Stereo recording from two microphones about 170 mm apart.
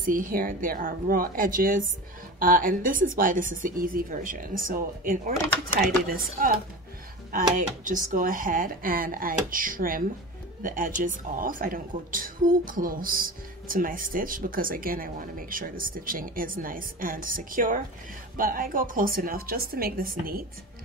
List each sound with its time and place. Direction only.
0.0 s a woman's voice: 55° right (ahead or behind)